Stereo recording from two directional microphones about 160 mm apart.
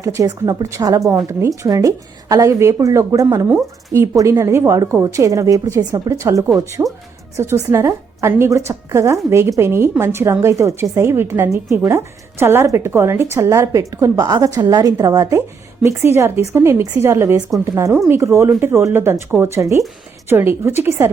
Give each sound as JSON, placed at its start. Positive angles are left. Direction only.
{"t": 0.0, "sound": "a woman's voice", "side_deg": -20}